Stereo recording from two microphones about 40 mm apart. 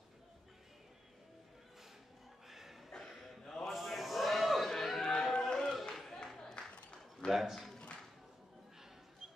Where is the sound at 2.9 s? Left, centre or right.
Centre.